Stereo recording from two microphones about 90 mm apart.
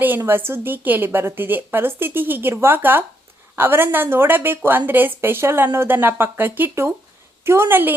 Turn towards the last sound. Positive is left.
turn(degrees=-25)  # may be behind; listen again after turning